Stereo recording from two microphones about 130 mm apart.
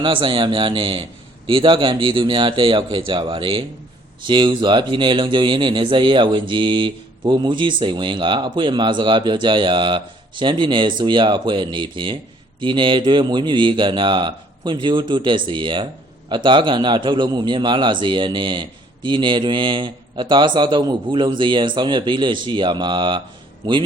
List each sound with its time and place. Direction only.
0.0 s speech: 40° right (ahead or behind)